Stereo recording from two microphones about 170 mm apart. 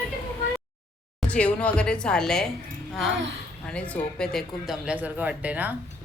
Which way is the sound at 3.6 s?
5° left (ahead or behind).